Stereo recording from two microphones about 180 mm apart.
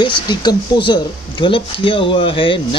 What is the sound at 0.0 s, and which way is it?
Speech, 25° left (ahead or behind).